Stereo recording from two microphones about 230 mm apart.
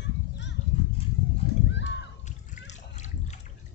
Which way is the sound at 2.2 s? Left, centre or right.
Left.